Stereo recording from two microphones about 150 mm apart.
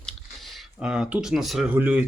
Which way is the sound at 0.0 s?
Centre (ahead or behind).